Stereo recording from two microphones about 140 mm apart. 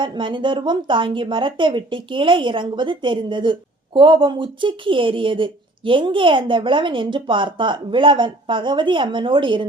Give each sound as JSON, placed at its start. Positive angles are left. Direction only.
{"t": 0.0, "sound": "speech", "side_deg": -35}